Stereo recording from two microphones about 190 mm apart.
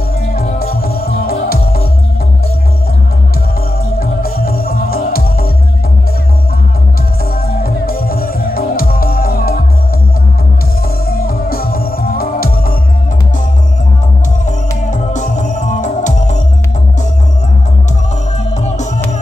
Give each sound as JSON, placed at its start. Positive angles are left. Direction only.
{"t": 0.3, "sound": "music", "side_deg": 50}
{"t": 4.0, "sound": "music", "side_deg": 50}
{"t": 7.4, "sound": "music", "side_deg": 50}
{"t": 11.1, "sound": "music", "side_deg": 50}
{"t": 14.9, "sound": "music", "side_deg": 40}